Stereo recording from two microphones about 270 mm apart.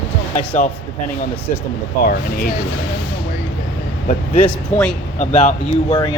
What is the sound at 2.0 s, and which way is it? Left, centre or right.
Speech, left.